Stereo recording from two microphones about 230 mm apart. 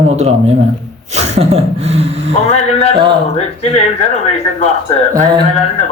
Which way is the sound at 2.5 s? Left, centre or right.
Left.